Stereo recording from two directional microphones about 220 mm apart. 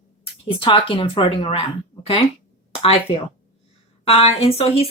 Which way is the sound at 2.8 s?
25° left (ahead or behind).